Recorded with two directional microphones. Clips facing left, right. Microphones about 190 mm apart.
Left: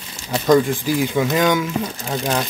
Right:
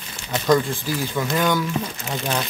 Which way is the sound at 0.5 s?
15° left (ahead or behind).